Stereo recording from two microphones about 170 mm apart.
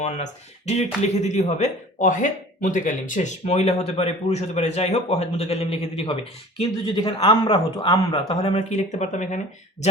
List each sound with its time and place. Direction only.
0.0 s speech: 40° left (ahead or behind)